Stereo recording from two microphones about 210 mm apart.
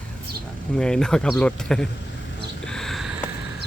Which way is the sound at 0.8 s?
5° left (ahead or behind).